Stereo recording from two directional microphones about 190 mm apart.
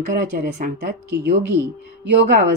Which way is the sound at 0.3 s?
50° right (ahead or behind).